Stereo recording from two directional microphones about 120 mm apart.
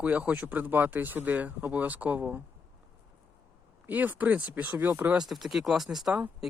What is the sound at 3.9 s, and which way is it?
Speech, 15° right (ahead or behind).